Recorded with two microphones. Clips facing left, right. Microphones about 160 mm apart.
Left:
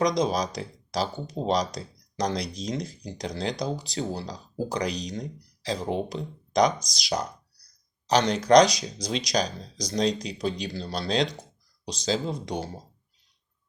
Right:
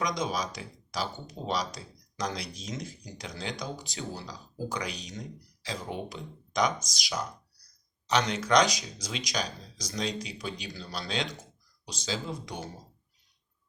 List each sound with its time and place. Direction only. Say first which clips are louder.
0.0 s speech: left 7 dB; 35° left (ahead or behind)